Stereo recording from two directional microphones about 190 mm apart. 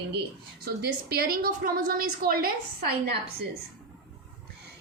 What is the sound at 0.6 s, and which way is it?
A child's voice, 55° right (ahead or behind).